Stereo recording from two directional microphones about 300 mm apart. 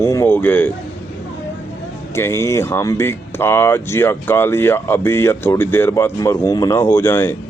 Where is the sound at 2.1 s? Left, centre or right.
Centre.